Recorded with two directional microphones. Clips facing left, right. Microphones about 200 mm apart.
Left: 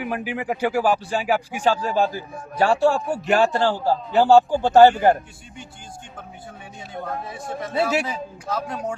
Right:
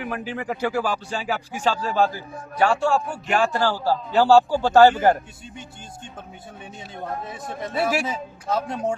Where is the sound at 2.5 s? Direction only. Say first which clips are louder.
Left 2 dB; 35° left (ahead or behind).